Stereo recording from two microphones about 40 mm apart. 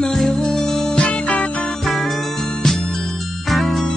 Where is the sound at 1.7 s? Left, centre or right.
Centre.